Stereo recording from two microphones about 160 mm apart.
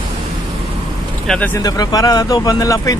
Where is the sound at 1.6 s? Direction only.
20° left (ahead or behind).